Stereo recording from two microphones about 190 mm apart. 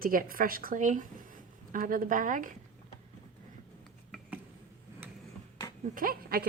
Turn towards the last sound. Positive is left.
turn(degrees=-50)  # may be behind; listen again after turning